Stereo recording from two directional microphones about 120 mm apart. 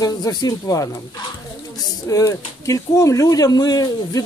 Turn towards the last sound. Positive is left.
turn(degrees=30)  # may be behind; listen again after turning